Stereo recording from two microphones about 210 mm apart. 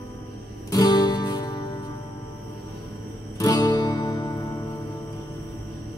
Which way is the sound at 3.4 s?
20° left (ahead or behind).